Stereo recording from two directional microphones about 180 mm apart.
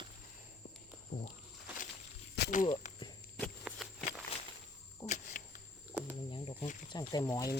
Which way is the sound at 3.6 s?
Centre (ahead or behind).